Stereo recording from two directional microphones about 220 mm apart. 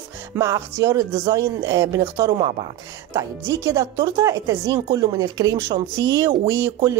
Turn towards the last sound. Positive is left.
turn(degrees=-10)  # may be behind; listen again after turning